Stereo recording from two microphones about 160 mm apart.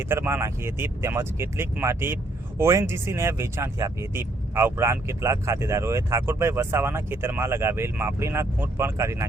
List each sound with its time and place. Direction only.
0.0 s speech: 15° right (ahead or behind)